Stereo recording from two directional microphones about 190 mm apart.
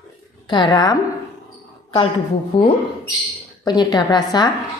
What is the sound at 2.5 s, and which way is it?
A woman's voice, 30° left (ahead or behind).